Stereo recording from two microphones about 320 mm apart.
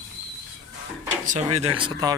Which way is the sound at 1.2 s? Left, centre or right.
Right.